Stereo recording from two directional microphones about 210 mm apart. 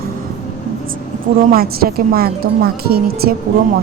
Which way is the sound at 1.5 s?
45° right (ahead or behind).